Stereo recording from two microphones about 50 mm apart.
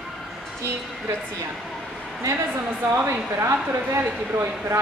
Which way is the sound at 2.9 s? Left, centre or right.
Right.